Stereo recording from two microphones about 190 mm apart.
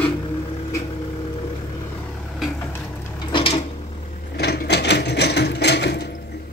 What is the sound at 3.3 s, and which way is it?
Drawer open or close, 30° left (ahead or behind).